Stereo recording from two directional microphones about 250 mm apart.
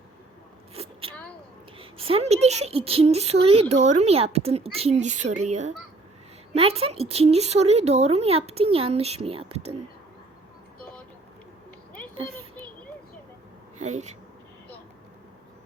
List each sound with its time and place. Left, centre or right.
0.7 s a sound: right
1.8 s speech: right
13.7 s speech: right